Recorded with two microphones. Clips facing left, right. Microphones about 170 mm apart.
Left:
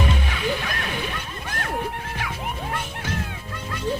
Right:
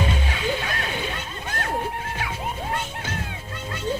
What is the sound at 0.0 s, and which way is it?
Music, 30° right (ahead or behind).